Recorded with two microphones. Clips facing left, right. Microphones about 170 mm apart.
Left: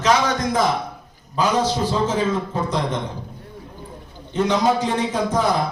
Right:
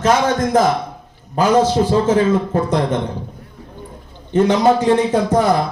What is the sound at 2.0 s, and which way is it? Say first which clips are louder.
Speech: right 7 dB; 55° right (ahead or behind).